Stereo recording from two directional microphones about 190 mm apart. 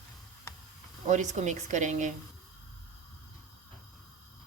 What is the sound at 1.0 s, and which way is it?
Speech, 40° right (ahead or behind).